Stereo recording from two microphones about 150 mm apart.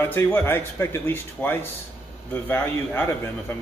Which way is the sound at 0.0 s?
15° left (ahead or behind).